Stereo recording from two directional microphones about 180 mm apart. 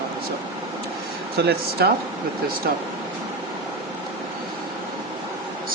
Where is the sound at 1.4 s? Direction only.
70° right (ahead or behind).